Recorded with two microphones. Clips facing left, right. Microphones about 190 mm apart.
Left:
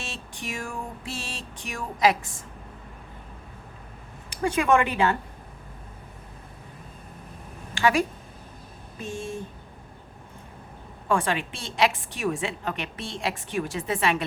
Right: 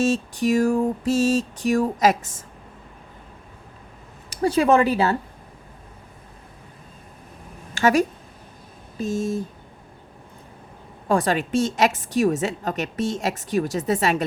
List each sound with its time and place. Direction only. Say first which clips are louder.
0.0 s a sound: right 17 dB; 40° right (ahead or behind)
4.3 s a woman's voice: right 4 dB; 35° right (ahead or behind)
7.8 s a woman's voice: right 4 dB; 45° right (ahead or behind)
11.1 s a woman's voice: right 5 dB; 40° right (ahead or behind)